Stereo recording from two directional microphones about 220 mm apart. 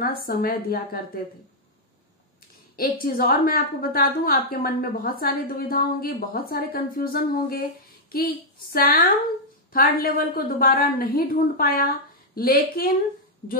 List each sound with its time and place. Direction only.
0.0 s a woman's voice: 40° left (ahead or behind)
2.7 s a woman's voice: 40° left (ahead or behind)